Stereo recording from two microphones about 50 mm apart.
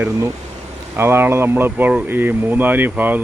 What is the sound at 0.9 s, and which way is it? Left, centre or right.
Speech, right.